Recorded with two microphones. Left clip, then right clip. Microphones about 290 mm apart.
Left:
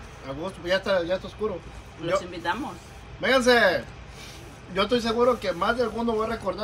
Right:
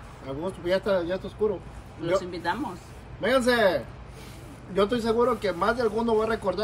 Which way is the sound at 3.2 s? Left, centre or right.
Centre.